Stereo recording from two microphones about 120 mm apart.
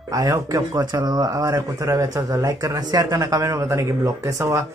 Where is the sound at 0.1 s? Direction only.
30° right (ahead or behind).